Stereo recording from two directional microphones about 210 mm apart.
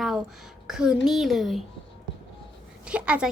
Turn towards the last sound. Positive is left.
turn(degrees=-5)  # may be behind; listen again after turning